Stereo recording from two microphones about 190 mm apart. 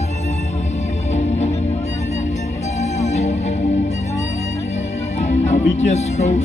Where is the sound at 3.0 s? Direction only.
35° left (ahead or behind).